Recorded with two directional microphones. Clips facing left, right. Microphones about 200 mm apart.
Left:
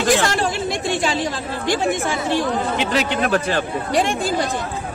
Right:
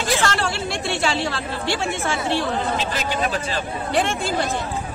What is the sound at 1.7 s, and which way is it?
Speech, 15° left (ahead or behind).